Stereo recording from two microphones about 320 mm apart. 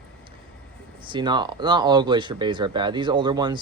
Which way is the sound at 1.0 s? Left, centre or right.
Centre.